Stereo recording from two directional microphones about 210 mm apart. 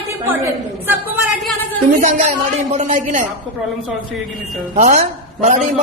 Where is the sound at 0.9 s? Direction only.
10° right (ahead or behind).